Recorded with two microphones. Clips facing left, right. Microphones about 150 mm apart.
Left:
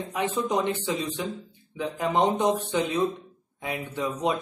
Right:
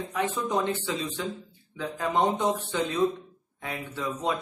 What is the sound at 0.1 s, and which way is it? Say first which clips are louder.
Speech: left 2 dB; 15° left (ahead or behind).